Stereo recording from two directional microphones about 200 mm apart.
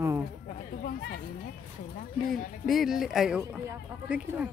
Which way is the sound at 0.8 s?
50° left (ahead or behind).